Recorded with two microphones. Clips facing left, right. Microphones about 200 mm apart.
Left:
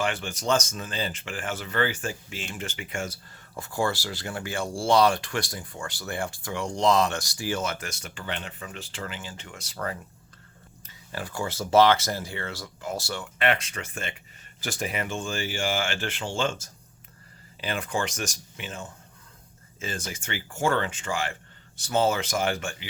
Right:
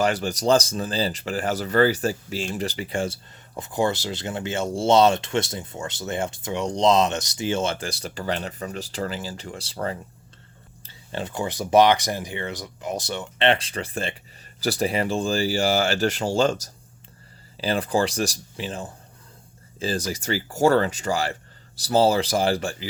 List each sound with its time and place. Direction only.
0.0 s speech: 40° right (ahead or behind)
3.5 s speech: 20° right (ahead or behind)